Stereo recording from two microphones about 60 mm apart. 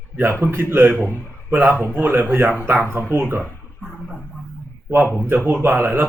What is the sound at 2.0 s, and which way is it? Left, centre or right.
Speech, right.